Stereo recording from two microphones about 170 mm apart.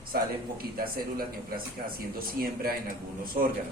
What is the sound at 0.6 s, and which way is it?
Speech, 60° right (ahead or behind).